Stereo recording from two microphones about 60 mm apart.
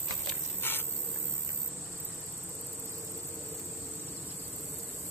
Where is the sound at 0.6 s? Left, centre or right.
Left.